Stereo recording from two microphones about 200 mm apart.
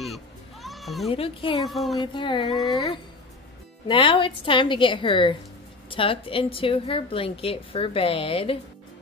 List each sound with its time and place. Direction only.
0.0 s children playing: centre (ahead or behind)
1.1 s a woman's voice: 25° left (ahead or behind)
1.6 s speech: centre (ahead or behind)
2.0 s a woman's voice: 25° left (ahead or behind)